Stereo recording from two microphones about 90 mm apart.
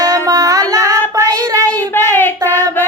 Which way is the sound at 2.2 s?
25° left (ahead or behind).